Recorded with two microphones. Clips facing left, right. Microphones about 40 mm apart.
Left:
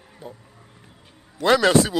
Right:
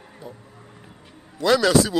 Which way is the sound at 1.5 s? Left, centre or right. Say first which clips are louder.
Left 1 dB; left.